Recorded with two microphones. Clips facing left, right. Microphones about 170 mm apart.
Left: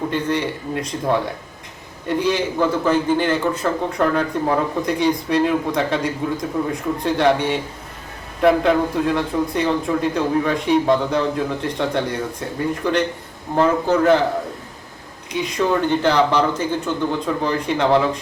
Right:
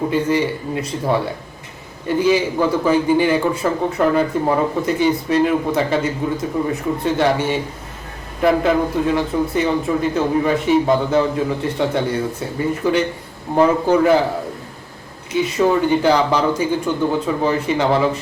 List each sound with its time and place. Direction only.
0.1 s a man's voice: 5° right (ahead or behind)
15.3 s a man's voice: 5° right (ahead or behind)